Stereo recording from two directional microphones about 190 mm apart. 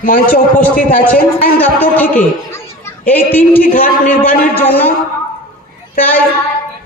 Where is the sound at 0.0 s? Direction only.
45° left (ahead or behind).